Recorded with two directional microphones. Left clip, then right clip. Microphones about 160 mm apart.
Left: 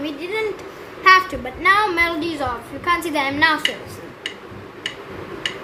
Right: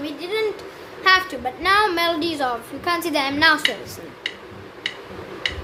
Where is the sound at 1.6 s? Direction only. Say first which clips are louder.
Left 2 dB; 35° right (ahead or behind).